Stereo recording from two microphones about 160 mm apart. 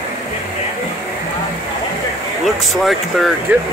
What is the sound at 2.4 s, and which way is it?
Speech, centre (ahead or behind).